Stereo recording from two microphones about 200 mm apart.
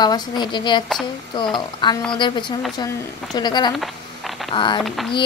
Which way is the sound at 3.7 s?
Centre (ahead or behind).